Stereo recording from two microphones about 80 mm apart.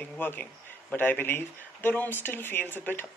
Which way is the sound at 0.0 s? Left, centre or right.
Left.